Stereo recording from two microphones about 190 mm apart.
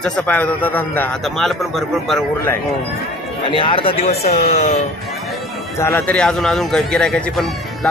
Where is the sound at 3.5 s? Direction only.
25° left (ahead or behind).